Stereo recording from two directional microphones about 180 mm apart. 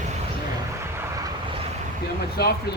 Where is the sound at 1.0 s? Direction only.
20° right (ahead or behind).